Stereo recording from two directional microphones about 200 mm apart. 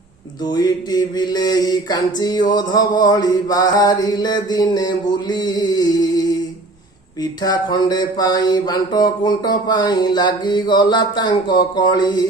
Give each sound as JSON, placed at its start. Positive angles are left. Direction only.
{"t": 0.4, "sound": "mantra", "side_deg": 20}